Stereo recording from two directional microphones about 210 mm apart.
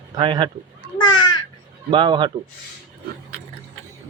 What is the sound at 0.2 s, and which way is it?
Speech, 25° right (ahead or behind).